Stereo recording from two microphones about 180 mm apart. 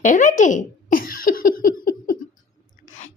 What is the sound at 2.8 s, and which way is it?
Chewing, 40° left (ahead or behind).